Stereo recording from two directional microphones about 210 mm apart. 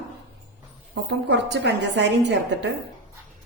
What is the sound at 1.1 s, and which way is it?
A woman's voice, 55° right (ahead or behind).